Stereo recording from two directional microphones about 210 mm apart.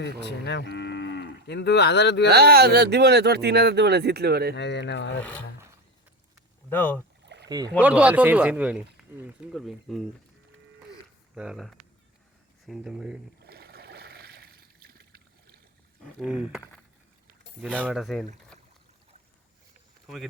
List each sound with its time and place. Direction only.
0.3 s cattle: 55° left (ahead or behind)
2.3 s speech: 50° right (ahead or behind)
4.5 s speech: 55° left (ahead or behind)
6.7 s speech: 10° left (ahead or behind)
7.3 s rowboat: 55° right (ahead or behind)
7.8 s speech: 5° right (ahead or behind)
11.3 s speech: centre (ahead or behind)
13.4 s a sound: 50° right (ahead or behind)
16.2 s speech: 5° right (ahead or behind)
17.7 s speech: 5° right (ahead or behind)
20.1 s speech: centre (ahead or behind)